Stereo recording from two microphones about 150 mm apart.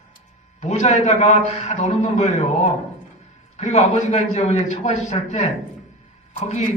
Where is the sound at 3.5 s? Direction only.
50° left (ahead or behind).